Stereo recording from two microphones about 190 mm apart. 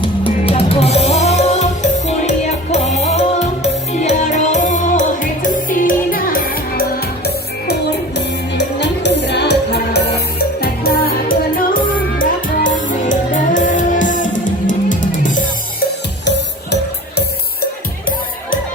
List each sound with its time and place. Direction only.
0.3 s music: 30° left (ahead or behind); by 6.8 s 50° left (ahead or behind)
7.3 s music: 60° left (ahead or behind); by 15.4 s 45° left (ahead or behind)
17.2 s music: 55° left (ahead or behind)